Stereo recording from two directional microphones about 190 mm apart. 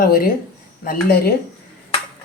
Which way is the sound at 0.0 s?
50° left (ahead or behind).